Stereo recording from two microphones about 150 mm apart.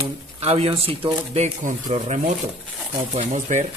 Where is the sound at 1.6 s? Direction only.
55° right (ahead or behind).